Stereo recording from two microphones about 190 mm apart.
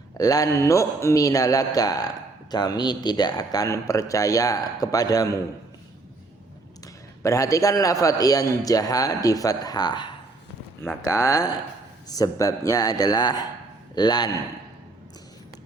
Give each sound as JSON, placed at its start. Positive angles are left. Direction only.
{"t": 0.2, "sound": "speech", "side_deg": 20}
{"t": 6.8, "sound": "a man's voice", "side_deg": 15}